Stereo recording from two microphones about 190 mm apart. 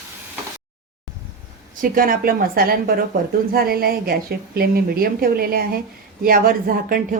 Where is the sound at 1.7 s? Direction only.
45° right (ahead or behind).